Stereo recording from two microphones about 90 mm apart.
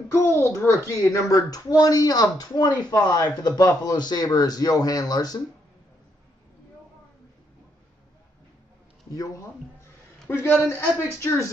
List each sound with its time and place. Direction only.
0.1 s a child's voice: 30° left (ahead or behind); by 2.7 s 50° left (ahead or behind)
2.9 s a child's voice: 40° left (ahead or behind)
10.2 s speech: 25° left (ahead or behind)